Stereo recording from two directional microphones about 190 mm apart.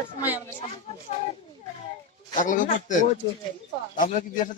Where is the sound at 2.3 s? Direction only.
45° left (ahead or behind).